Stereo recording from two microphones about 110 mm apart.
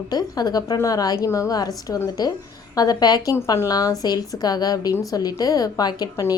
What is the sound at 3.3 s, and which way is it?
Speech, 25° left (ahead or behind).